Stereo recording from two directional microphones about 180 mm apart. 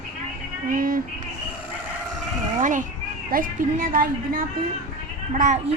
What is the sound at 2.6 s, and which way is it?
A woman's voice, 45° right (ahead or behind).